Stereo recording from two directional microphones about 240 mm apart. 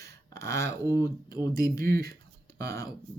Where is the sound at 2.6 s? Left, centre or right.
Centre.